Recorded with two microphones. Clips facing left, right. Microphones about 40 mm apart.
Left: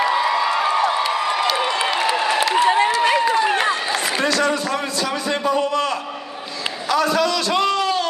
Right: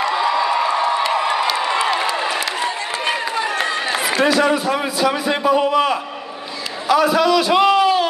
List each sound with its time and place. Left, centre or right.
0.0 s crowd: centre
2.1 s a sound: centre
3.0 s run: centre
3.4 s run: left
3.9 s a man's voice: centre